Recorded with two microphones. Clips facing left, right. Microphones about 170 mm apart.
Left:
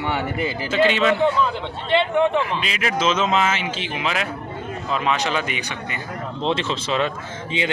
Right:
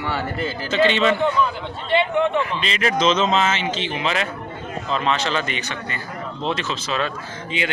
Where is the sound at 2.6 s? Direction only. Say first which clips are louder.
Right 2 dB; 5° left (ahead or behind).